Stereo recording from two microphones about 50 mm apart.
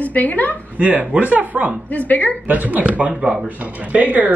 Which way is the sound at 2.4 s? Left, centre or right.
Right.